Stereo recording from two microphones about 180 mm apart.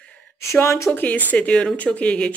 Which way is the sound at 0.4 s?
15° left (ahead or behind).